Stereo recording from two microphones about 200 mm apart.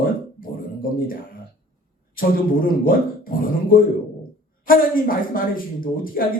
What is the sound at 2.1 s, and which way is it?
A man's voice, 45° left (ahead or behind).